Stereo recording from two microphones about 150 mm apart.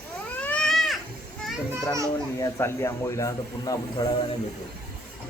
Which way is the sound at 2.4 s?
20° left (ahead or behind).